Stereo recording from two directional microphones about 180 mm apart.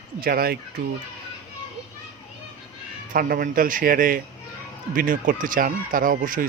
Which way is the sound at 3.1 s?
55° right (ahead or behind).